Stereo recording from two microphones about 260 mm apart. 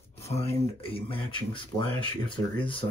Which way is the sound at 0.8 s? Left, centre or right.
Left.